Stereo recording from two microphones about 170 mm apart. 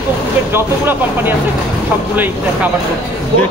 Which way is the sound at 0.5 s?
15° right (ahead or behind).